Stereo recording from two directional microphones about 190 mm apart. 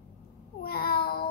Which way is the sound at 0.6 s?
55° left (ahead or behind).